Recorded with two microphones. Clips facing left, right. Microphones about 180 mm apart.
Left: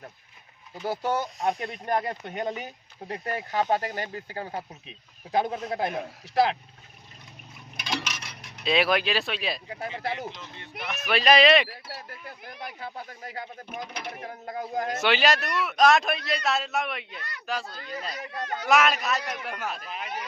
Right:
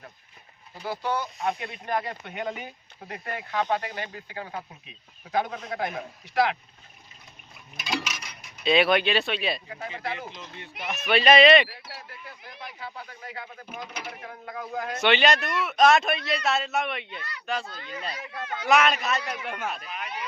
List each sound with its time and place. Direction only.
0.9 s speech: 45° left (ahead or behind)
5.3 s speech: 30° left (ahead or behind)
7.9 s mechanisms: 10° right (ahead or behind)
9.6 s speech: 35° left (ahead or behind)
10.9 s a man's voice: centre (ahead or behind)
11.9 s speech: 45° left (ahead or behind)
15.0 s a man's voice: centre (ahead or behind)
17.7 s speech: 40° left (ahead or behind)
18.7 s a man's voice: centre (ahead or behind)